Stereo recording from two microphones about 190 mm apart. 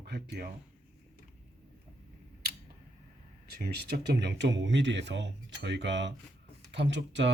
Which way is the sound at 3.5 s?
55° right (ahead or behind).